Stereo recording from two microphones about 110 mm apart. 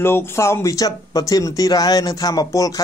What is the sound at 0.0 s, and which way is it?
Speech, 25° left (ahead or behind).